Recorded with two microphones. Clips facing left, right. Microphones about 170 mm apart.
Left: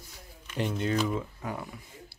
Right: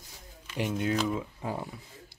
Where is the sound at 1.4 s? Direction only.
30° right (ahead or behind).